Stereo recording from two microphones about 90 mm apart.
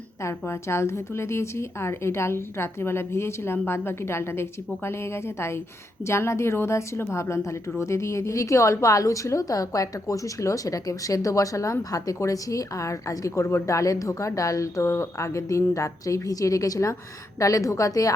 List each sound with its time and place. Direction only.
0.2 s a woman's voice: 30° left (ahead or behind)